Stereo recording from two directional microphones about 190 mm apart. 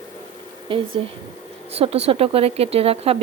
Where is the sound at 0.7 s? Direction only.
25° right (ahead or behind).